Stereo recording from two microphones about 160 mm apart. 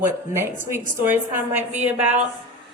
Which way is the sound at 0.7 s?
15° right (ahead or behind).